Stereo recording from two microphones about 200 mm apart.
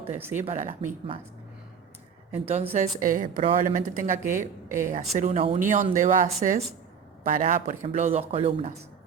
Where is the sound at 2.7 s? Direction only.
40° right (ahead or behind).